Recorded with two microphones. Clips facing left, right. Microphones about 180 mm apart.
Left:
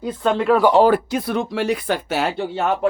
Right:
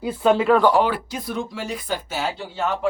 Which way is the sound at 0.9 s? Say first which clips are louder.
Left 8 dB; 55° left (ahead or behind).